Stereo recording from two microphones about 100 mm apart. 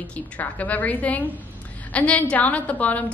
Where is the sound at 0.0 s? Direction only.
15° left (ahead or behind).